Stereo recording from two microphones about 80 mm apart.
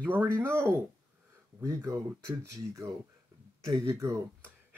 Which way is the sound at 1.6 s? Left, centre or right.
Right.